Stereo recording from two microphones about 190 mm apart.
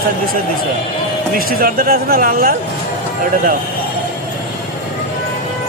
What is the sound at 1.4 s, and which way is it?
Speech, 50° right (ahead or behind).